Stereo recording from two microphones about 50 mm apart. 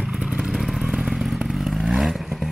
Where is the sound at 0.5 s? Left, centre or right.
Centre.